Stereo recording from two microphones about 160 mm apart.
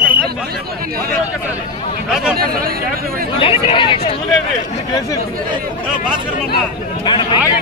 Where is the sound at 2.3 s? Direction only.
65° right (ahead or behind).